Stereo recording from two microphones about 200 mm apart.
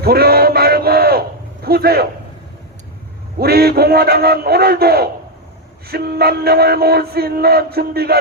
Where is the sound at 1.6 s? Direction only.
50° right (ahead or behind).